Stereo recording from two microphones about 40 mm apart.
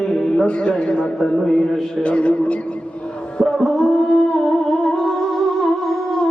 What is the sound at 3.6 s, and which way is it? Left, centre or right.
Music, centre.